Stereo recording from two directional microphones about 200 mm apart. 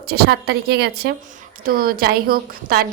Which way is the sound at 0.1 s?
55° right (ahead or behind).